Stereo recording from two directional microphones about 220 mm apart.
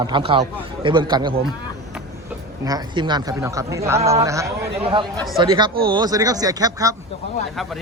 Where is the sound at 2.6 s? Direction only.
20° right (ahead or behind).